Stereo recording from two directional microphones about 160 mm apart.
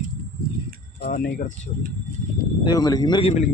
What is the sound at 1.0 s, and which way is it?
Speech, 65° left (ahead or behind).